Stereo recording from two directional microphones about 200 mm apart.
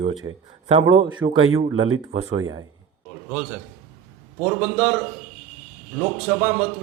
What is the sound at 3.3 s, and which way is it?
A man's voice, 5° right (ahead or behind).